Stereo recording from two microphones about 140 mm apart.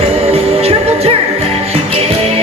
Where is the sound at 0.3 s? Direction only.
45° right (ahead or behind).